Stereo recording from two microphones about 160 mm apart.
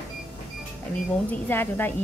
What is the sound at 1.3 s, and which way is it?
Speech, 15° left (ahead or behind).